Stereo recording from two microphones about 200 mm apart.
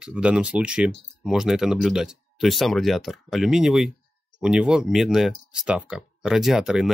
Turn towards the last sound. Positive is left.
turn(degrees=0)  # may be behind; listen again after turning